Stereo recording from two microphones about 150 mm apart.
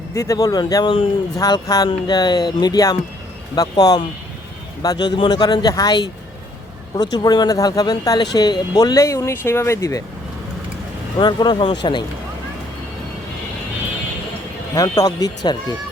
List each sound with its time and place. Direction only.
0.1 s speech: 20° left (ahead or behind)
11.2 s speech: 30° left (ahead or behind)
14.8 s speech: 25° left (ahead or behind)